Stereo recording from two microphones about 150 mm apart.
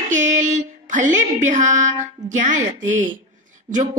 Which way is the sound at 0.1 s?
55° right (ahead or behind).